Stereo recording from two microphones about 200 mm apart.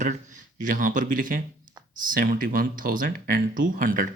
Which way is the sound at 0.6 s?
40° right (ahead or behind).